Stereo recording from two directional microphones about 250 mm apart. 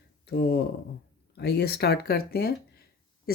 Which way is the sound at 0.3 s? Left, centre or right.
Left.